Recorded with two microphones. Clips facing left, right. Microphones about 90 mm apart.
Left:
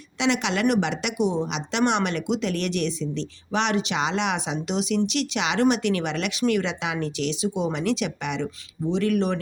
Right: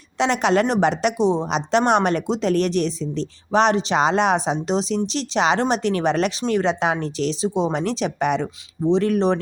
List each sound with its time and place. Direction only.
0.2 s a woman's voice: 40° right (ahead or behind)